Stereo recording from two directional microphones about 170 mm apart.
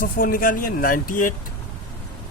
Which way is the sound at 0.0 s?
55° left (ahead or behind).